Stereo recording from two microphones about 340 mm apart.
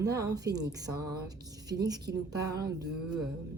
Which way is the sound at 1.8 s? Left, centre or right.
Centre.